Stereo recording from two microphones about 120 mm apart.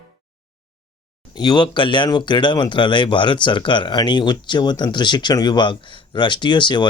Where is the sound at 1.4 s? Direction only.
35° left (ahead or behind).